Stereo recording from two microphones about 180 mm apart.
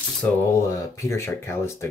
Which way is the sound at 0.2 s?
15° left (ahead or behind).